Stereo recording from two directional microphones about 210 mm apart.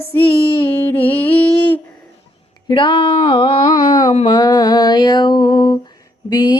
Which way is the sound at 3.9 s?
35° left (ahead or behind).